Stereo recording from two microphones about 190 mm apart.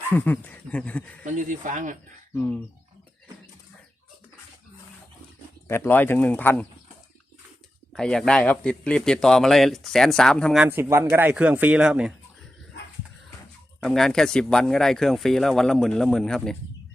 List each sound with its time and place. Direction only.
0.1 s speech: 10° left (ahead or behind)
1.2 s speech: 45° right (ahead or behind)
2.3 s speech: 10° left (ahead or behind)
5.6 s speech: 15° left (ahead or behind)
7.9 s a man's voice: centre (ahead or behind)
10.7 s speech: 10° right (ahead or behind)
13.8 s a man's voice: centre (ahead or behind)